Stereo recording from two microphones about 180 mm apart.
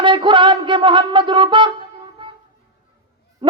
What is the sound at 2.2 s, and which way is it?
Wind instrument, 25° right (ahead or behind).